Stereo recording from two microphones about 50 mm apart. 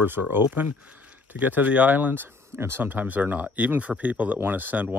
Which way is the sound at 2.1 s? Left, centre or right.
Right.